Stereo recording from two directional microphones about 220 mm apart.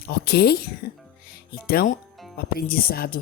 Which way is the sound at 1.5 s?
45° left (ahead or behind).